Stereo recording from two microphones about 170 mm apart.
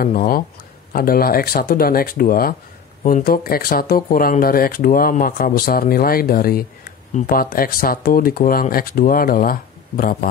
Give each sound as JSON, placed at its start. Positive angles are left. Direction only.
{"t": 0.0, "sound": "speech", "side_deg": 55}